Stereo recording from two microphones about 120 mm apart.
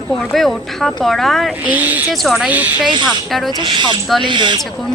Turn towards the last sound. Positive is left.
turn(degrees=-40)  # may be behind; listen again after turning